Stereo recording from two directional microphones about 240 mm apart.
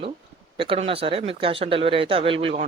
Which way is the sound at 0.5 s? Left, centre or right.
Right.